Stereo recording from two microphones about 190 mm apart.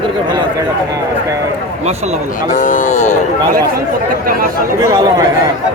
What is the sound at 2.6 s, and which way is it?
Speech, 40° left (ahead or behind).